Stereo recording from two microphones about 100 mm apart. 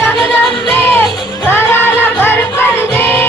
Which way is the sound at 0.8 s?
20° left (ahead or behind).